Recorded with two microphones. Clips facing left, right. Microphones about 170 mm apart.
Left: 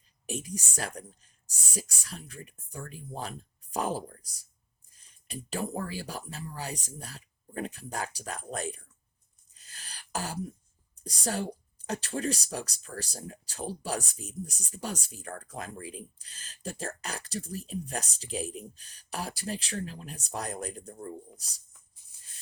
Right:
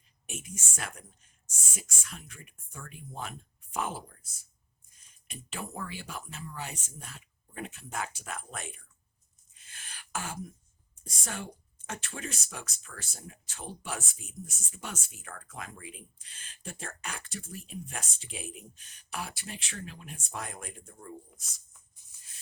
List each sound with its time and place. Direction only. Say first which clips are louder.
0.3 s speech: left 7 dB; 35° left (ahead or behind)
9.6 s beatboxing: left 1 dB; 35° left (ahead or behind)
10.9 s speech: left 8 dB; 35° left (ahead or behind)